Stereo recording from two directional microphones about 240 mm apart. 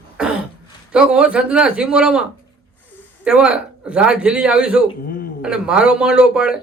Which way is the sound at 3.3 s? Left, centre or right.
Centre.